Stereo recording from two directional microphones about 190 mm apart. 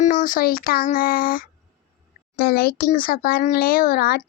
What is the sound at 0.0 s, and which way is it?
Speech, 40° left (ahead or behind).